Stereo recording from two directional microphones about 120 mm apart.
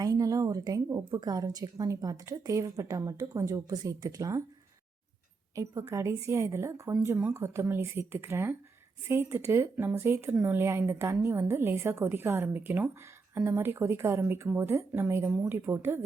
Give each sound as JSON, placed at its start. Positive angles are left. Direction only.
{"t": 0.0, "sound": "a woman's voice", "side_deg": -30}
{"t": 5.5, "sound": "a woman's voice", "side_deg": -25}